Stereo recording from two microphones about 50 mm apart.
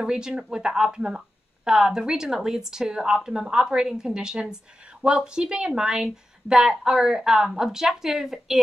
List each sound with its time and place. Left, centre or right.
0.0 s speech: centre